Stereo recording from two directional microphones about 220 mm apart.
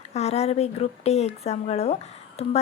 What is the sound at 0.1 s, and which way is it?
Speech, 30° left (ahead or behind).